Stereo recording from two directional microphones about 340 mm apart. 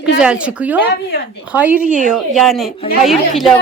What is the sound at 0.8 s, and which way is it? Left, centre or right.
Speech, left.